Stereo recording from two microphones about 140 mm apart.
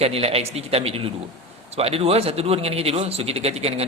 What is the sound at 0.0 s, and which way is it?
Speech, 45° right (ahead or behind).